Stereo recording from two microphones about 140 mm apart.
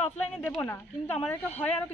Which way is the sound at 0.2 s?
10° left (ahead or behind).